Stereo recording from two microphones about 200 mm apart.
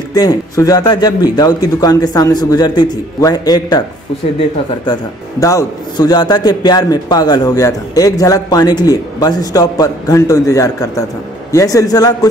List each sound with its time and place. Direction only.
0.1 s a man's voice: 20° left (ahead or behind)
5.4 s a man's voice: 15° left (ahead or behind)